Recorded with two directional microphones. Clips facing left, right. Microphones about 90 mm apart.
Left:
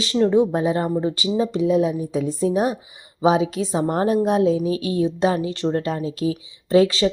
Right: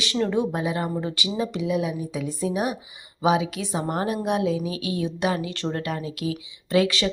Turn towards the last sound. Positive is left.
turn(degrees=25)  # may be behind; listen again after turning